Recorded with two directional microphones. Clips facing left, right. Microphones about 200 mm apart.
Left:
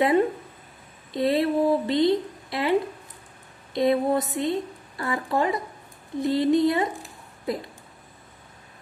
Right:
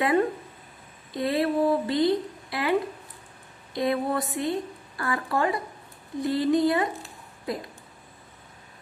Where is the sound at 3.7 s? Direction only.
20° left (ahead or behind).